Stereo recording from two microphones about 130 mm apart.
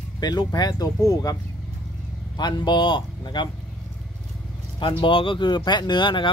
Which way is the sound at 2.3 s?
35° left (ahead or behind).